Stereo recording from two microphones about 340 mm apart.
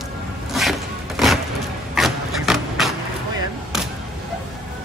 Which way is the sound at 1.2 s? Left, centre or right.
Centre.